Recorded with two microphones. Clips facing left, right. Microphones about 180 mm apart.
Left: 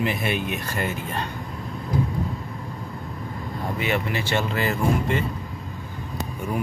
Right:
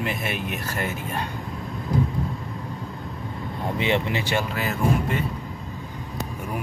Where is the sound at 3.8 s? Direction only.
20° right (ahead or behind).